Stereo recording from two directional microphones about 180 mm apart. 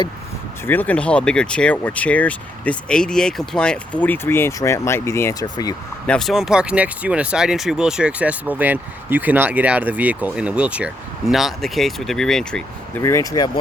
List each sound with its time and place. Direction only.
0.6 s speech: 10° left (ahead or behind)
6.1 s speech: centre (ahead or behind)
13.0 s speech: 15° left (ahead or behind)